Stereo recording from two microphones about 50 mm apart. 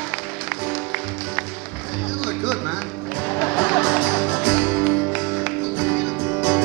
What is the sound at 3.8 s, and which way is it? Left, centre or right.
Music, right.